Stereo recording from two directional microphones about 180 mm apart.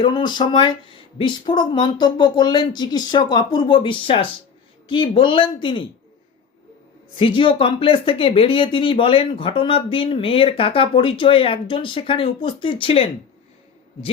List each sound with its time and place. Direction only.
0.0 s speech: 25° left (ahead or behind)
7.2 s speech: 30° left (ahead or behind)